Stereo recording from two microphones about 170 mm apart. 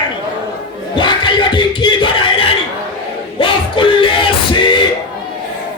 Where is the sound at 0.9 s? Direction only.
25° left (ahead or behind).